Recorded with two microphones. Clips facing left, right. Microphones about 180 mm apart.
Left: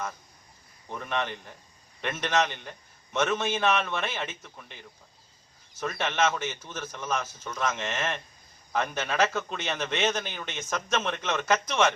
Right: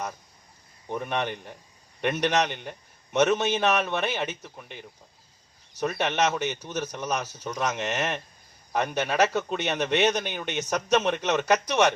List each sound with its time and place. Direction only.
0.9 s a man's voice: 15° right (ahead or behind)
5.8 s a man's voice: 20° right (ahead or behind)